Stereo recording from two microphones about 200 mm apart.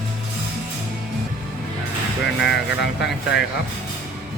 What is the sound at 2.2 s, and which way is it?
Speech, 60° left (ahead or behind).